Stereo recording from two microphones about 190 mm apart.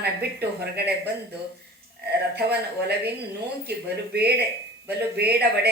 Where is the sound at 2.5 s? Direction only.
60° right (ahead or behind).